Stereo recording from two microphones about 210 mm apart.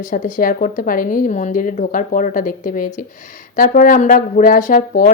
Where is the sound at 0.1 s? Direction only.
40° left (ahead or behind).